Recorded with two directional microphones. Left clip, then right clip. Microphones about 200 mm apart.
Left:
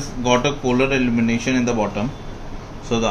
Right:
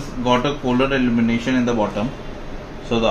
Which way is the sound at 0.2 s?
30° left (ahead or behind).